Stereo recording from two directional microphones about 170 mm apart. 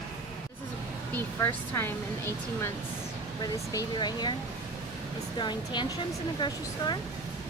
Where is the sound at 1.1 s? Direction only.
10° left (ahead or behind).